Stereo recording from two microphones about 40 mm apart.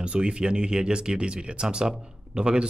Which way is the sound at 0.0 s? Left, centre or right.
Right.